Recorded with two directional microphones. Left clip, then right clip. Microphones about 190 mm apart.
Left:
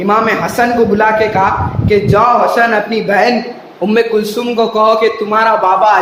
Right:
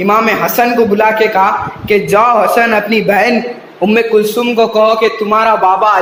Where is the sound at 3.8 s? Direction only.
10° right (ahead or behind).